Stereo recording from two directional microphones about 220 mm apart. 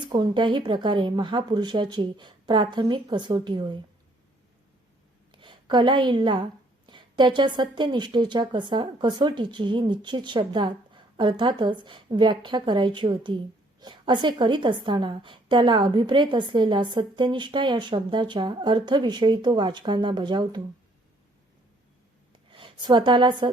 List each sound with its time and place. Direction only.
0.1 s a woman's voice: 20° right (ahead or behind)
5.3 s a woman's voice: 20° right (ahead or behind)
22.4 s a woman's voice: 25° right (ahead or behind)